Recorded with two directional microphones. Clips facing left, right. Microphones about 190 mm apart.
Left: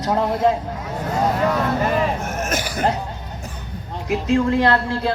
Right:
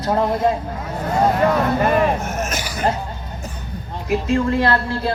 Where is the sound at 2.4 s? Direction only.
55° left (ahead or behind).